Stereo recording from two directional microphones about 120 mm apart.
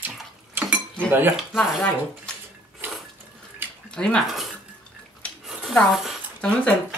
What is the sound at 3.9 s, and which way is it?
Speech, 5° left (ahead or behind).